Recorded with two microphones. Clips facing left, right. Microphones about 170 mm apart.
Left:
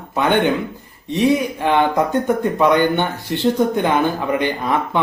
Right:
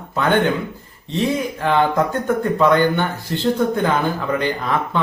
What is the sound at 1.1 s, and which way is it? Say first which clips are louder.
Speech: left 4 dB; 15° left (ahead or behind).